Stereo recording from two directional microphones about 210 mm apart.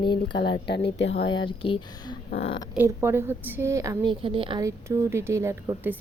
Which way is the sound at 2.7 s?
10° right (ahead or behind).